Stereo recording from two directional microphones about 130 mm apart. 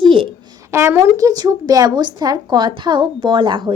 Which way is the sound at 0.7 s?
20° right (ahead or behind).